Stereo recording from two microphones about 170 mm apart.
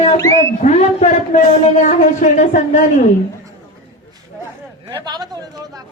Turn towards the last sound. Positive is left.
turn(degrees=-25)  # may be behind; listen again after turning